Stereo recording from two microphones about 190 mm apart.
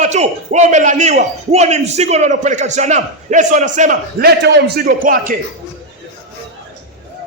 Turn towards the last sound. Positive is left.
turn(degrees=-45)  # may be behind; listen again after turning